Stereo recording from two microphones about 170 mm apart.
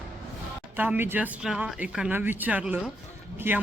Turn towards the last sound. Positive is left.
turn(degrees=-15)  # may be behind; listen again after turning